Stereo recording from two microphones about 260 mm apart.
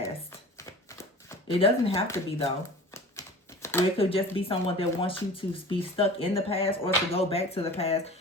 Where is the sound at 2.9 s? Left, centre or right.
Centre.